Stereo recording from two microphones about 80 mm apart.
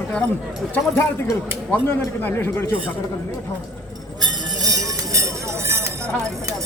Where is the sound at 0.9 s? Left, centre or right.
Left.